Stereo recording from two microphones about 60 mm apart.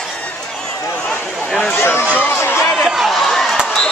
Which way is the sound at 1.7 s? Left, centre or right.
Left.